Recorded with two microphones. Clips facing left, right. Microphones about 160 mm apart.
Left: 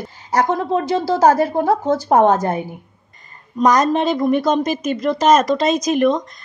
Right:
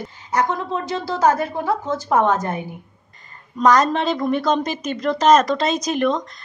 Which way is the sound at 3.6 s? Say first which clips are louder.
Left 1 dB; 15° left (ahead or behind).